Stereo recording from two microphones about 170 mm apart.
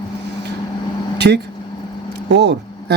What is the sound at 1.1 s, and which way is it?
Vehicle, 80° right.